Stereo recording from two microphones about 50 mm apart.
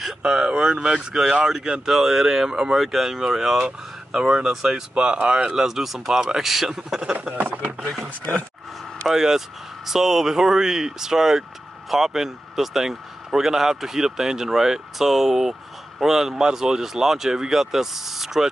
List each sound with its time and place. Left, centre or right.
0.2 s speech: centre
7.3 s speech: right
7.9 s speech: centre